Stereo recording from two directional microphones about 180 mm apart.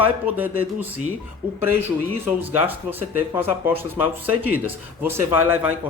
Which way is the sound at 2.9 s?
10° right (ahead or behind).